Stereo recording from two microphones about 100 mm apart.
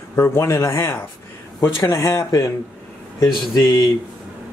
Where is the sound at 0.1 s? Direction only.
25° left (ahead or behind).